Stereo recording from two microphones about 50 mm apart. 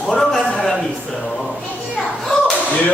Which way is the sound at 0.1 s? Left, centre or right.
Centre.